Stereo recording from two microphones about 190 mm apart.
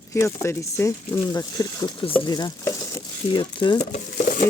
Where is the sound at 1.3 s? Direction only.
20° left (ahead or behind).